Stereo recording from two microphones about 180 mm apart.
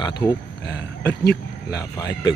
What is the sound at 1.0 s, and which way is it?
Speech, 65° left (ahead or behind).